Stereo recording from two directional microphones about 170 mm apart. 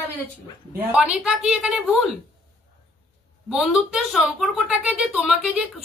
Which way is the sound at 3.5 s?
5° right (ahead or behind).